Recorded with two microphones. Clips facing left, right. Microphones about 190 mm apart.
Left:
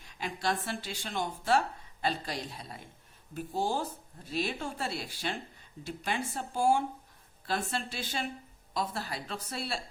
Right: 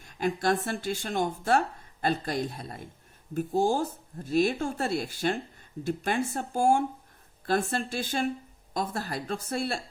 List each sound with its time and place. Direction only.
0.0 s speech: 50° right (ahead or behind)